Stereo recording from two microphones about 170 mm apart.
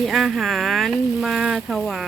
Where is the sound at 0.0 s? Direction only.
Centre (ahead or behind).